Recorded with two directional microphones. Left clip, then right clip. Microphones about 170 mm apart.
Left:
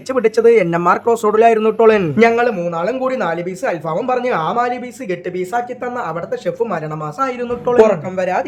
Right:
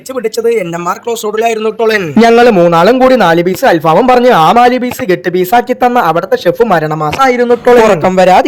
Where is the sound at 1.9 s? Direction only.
55° right (ahead or behind).